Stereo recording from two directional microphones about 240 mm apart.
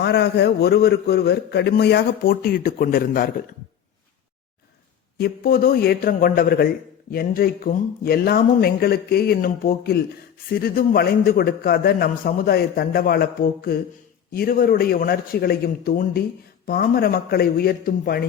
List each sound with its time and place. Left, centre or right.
0.0 s a man's voice: left
5.1 s a man's voice: left